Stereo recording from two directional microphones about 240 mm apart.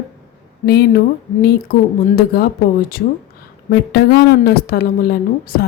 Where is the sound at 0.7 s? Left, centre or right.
Left.